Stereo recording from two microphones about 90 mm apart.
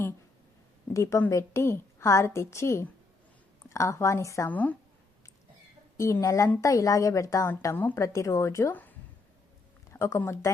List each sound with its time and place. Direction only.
0.9 s a woman's voice: 35° left (ahead or behind)
4.4 s speech: 20° left (ahead or behind)
6.0 s a woman's voice: 35° left (ahead or behind)
8.7 s a sound: 20° left (ahead or behind)
9.9 s speech: 30° left (ahead or behind)